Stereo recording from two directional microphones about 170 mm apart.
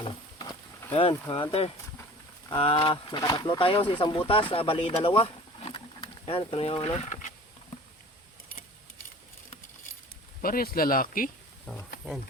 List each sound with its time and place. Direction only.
0.9 s speech: 30° left (ahead or behind)
5.7 s a sound: 30° left (ahead or behind); by 7.3 s 45° left (ahead or behind)
10.4 s speech: 60° left (ahead or behind)
11.7 s speech: centre (ahead or behind)